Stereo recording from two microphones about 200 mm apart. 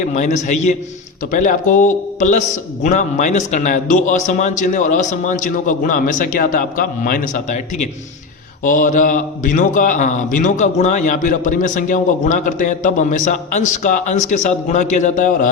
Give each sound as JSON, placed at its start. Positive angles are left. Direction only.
{"t": 0.0, "sound": "a man's voice", "side_deg": 35}